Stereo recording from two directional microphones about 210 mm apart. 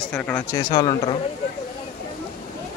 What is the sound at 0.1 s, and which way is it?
Speech, 5° left (ahead or behind).